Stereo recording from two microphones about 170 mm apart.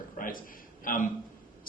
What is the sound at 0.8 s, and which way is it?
Speech, 55° left (ahead or behind).